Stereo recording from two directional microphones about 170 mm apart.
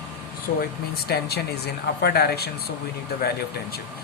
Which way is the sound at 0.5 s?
50° left (ahead or behind).